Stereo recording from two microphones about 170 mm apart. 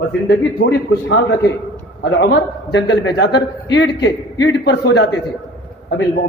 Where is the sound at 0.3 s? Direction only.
90° left.